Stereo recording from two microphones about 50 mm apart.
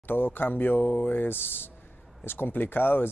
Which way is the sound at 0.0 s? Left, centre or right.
Left.